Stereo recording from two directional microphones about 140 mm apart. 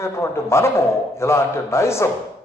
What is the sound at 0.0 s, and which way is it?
A man's voice, 20° left (ahead or behind).